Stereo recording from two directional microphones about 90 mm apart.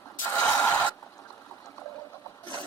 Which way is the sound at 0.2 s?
20° left (ahead or behind).